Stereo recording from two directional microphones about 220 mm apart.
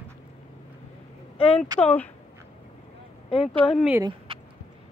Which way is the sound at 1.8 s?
5° left (ahead or behind).